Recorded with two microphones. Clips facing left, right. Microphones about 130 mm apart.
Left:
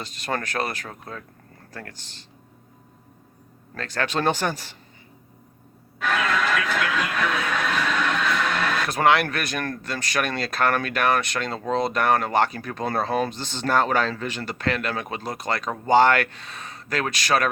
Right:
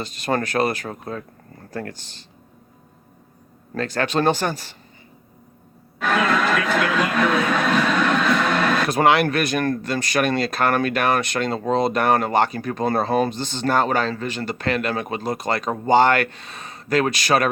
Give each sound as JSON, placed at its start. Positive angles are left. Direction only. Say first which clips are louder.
{"t": 0.0, "sound": "speech", "louder": "right 6 dB", "side_deg": -5}
{"t": 0.9, "sound": "speech", "louder": "right 7 dB", "side_deg": -20}
{"t": 3.8, "sound": "speech", "louder": "right 5 dB", "side_deg": -5}
{"t": 6.0, "sound": "television", "louder": "right 4 dB", "side_deg": -40}
{"t": 8.9, "sound": "speech", "louder": "right 1 dB", "side_deg": -5}
{"t": 13.3, "sound": "speech", "louder": "right 2 dB", "side_deg": 5}